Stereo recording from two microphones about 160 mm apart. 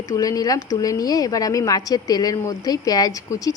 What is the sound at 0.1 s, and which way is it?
A woman's voice, 20° left (ahead or behind).